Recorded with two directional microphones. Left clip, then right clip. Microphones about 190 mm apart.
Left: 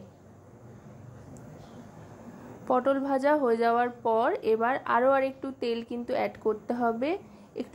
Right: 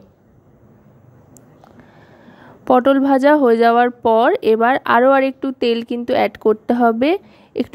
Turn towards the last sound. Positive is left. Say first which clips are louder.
# right 14 dB
turn(degrees=-45)  # may be behind; listen again after turning